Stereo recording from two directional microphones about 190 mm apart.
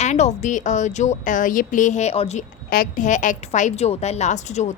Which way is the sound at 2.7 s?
45° left (ahead or behind).